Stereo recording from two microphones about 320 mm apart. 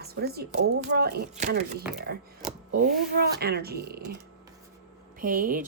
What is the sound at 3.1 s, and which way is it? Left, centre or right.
Speech, right.